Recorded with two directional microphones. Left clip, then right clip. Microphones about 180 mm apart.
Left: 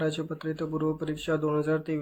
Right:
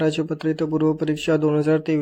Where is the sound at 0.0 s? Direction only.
35° right (ahead or behind).